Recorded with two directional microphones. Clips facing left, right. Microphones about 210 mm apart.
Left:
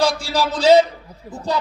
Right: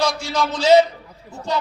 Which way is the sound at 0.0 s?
35° left (ahead or behind).